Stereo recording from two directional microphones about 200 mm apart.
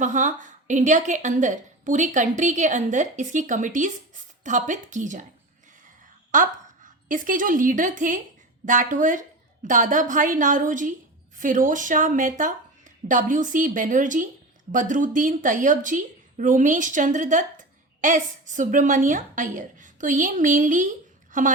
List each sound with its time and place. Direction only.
0.0 s a woman's voice: 40° right (ahead or behind)
6.3 s a woman's voice: 40° right (ahead or behind)